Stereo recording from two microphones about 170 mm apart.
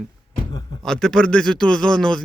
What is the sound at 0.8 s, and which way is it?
Speech, centre (ahead or behind).